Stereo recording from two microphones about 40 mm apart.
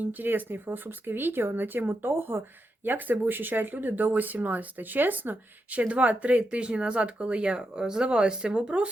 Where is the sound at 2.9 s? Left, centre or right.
Right.